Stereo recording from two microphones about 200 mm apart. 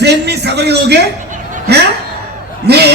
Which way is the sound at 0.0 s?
55° right (ahead or behind).